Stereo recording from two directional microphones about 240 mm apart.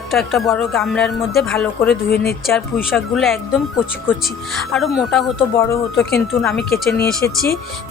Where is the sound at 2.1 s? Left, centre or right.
Left.